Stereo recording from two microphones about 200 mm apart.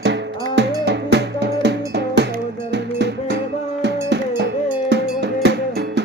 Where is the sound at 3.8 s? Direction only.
60° right (ahead or behind).